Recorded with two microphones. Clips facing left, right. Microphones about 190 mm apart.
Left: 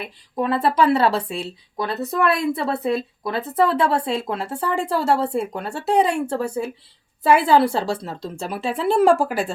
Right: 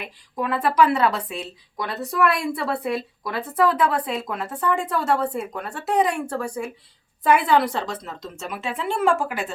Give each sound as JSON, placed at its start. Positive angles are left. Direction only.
{"t": 0.0, "sound": "speech", "side_deg": 30}